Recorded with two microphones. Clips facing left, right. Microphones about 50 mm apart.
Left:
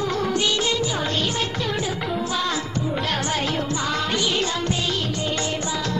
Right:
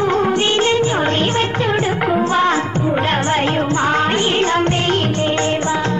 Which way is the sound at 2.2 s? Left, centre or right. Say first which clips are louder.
Right 10 dB; right.